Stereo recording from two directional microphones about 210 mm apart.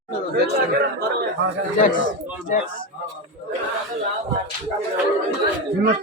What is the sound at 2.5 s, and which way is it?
Speech, 35° left (ahead or behind).